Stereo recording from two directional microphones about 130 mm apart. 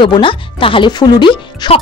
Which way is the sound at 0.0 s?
40° left (ahead or behind).